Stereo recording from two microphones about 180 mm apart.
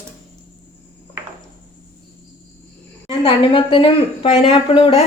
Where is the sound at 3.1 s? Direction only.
30° left (ahead or behind).